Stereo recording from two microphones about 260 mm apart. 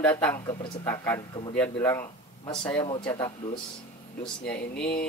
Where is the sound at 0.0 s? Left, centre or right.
Centre.